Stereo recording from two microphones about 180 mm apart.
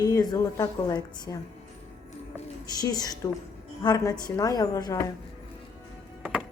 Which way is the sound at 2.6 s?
20° left (ahead or behind).